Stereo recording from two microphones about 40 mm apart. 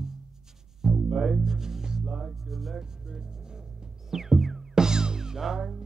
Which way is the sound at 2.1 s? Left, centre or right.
Centre.